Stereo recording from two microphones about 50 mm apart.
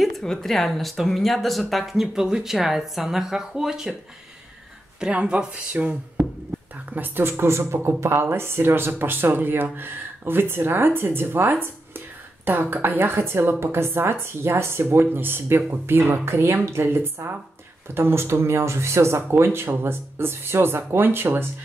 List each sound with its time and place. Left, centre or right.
0.2 s speech: centre
5.1 s speech: right
7.0 s speech: right
19.3 s speech: right